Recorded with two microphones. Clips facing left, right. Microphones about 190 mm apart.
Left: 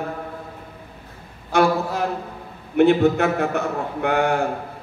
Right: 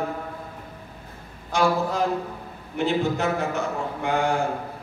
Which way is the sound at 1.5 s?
60° left (ahead or behind).